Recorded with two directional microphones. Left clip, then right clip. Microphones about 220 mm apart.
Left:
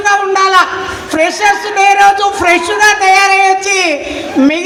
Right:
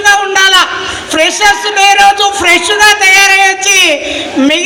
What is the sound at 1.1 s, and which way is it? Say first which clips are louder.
A man's voice: right 2 dB; 45° left (ahead or behind).